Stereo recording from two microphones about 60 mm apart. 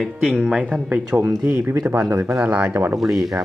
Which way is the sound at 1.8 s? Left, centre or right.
Right.